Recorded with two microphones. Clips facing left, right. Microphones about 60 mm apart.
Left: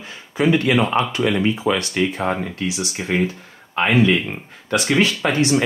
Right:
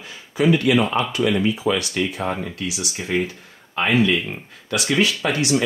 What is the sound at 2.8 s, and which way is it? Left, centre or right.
Speech, left.